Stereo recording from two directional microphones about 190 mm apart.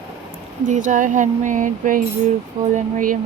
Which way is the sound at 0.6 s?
40° right (ahead or behind).